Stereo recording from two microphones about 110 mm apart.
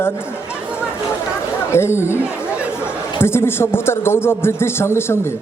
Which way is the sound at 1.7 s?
25° left (ahead or behind).